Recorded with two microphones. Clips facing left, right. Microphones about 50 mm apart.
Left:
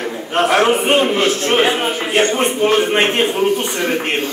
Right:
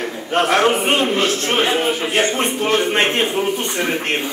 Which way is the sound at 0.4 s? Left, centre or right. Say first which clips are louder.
Left 2 dB; centre.